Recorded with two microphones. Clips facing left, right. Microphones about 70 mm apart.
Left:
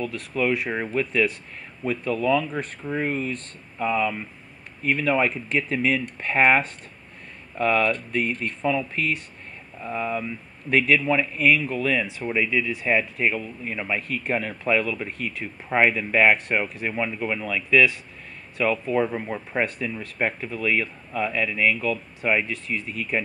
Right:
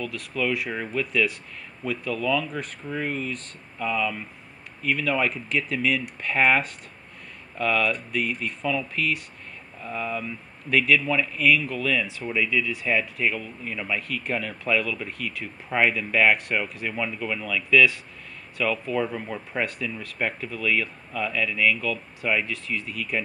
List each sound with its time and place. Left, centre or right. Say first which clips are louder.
0.0 s speech: left 3 dB; left